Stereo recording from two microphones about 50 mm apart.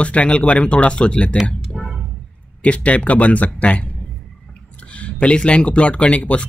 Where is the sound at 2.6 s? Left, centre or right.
Left.